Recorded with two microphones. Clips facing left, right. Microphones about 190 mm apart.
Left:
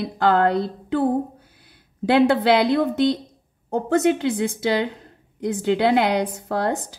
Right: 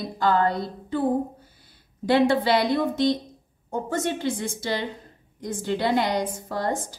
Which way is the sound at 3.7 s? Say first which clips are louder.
Left 8 dB; 65° left (ahead or behind).